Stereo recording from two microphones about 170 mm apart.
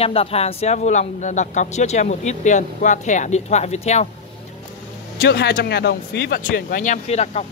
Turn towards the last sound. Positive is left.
turn(degrees=40)  # may be behind; listen again after turning